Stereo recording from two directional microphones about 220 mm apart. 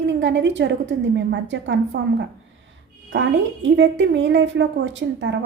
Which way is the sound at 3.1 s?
55° right (ahead or behind).